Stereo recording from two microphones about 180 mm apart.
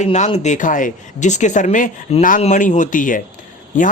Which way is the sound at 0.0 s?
40° left (ahead or behind).